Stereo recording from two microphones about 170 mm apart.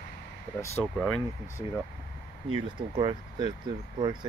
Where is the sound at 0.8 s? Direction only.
Centre (ahead or behind).